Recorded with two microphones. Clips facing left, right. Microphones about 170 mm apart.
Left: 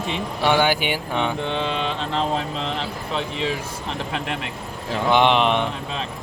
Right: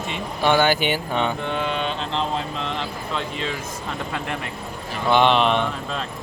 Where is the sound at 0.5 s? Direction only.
10° left (ahead or behind).